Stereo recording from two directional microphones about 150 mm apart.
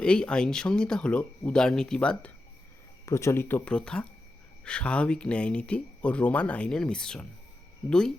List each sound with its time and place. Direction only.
0.0 s speech: 5° left (ahead or behind)
3.1 s speech: 20° left (ahead or behind)